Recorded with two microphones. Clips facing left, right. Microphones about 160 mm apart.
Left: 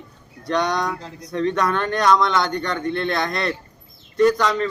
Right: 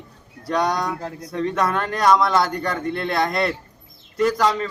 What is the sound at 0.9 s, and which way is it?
Speech, 55° right (ahead or behind).